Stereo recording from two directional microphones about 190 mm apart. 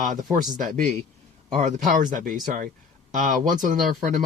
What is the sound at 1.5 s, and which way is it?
Speech, 40° right (ahead or behind).